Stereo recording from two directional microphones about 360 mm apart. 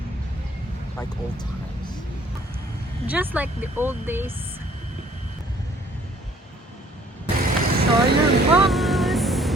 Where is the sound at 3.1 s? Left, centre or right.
Centre.